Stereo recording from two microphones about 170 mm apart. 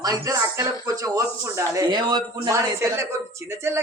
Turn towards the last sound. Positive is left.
turn(degrees=-15)  # may be behind; listen again after turning